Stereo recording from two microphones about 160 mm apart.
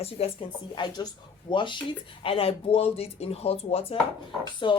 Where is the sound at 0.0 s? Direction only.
40° left (ahead or behind).